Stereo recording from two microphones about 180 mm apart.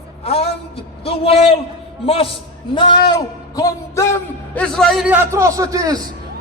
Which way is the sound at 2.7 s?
25° left (ahead or behind).